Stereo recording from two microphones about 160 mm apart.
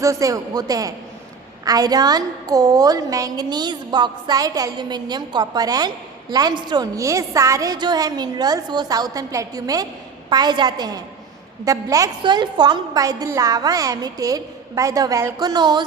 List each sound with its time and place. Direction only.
0.0 s a woman's voice: 20° right (ahead or behind)